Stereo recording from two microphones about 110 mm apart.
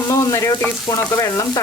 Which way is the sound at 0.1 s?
30° left (ahead or behind).